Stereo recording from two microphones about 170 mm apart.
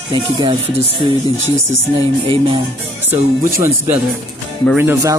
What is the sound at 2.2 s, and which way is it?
Music, 30° right (ahead or behind).